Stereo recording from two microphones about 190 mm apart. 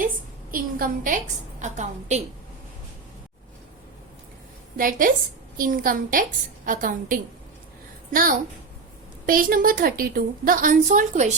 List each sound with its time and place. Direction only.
0.5 s a woman's voice: 45° right (ahead or behind)
4.8 s a woman's voice: 45° right (ahead or behind)